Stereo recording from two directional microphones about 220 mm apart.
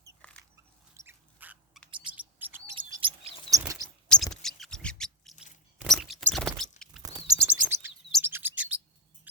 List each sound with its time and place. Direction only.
0.2 s biting: 5° left (ahead or behind)
0.9 s a sound: 10° right (ahead or behind)
2.1 s chirp: 10° right (ahead or behind)
2.7 s bird: 25° right (ahead or behind)
3.5 s chirp: 15° right (ahead or behind)
4.1 s a sound: centre (ahead or behind)
7.0 s chirp: 15° right (ahead or behind)
9.3 s music: 5° right (ahead or behind)